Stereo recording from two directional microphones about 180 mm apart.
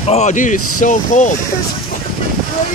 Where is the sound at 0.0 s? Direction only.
40° left (ahead or behind).